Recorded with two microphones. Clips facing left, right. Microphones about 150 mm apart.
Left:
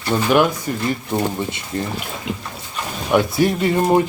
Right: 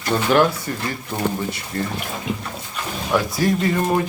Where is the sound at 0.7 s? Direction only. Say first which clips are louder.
Left 5 dB; 20° left (ahead or behind).